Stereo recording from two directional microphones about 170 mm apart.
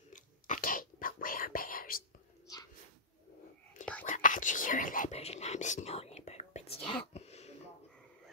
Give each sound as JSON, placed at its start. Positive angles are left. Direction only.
{"t": 0.1, "sound": "whispering", "side_deg": 50}
{"t": 2.4, "sound": "whispering", "side_deg": 20}
{"t": 4.0, "sound": "whispering", "side_deg": 50}
{"t": 7.2, "sound": "throat clearing", "side_deg": 40}